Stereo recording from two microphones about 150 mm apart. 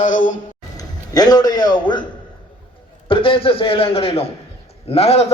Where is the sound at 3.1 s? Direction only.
35° left (ahead or behind).